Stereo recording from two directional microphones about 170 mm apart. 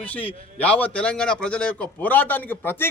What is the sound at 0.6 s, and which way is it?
A man's voice, 10° left (ahead or behind).